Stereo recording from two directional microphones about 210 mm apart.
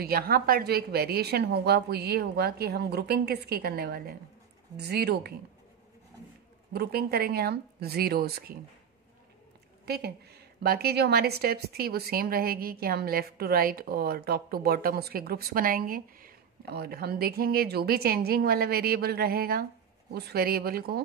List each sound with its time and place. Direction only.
0.0 s a woman's voice: 45° right (ahead or behind)
6.7 s a woman's voice: 50° right (ahead or behind)
9.8 s a woman's voice: 50° right (ahead or behind)